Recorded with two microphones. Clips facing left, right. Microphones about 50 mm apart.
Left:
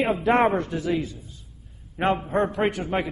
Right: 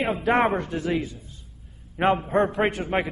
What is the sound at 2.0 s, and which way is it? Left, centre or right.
Speech, centre.